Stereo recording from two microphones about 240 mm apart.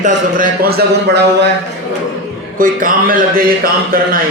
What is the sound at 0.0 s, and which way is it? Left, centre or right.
A man's voice, right.